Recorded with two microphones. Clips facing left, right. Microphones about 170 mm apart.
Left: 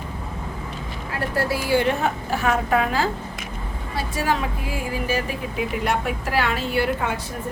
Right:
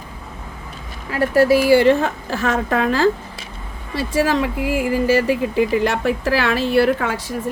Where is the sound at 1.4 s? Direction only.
90° right.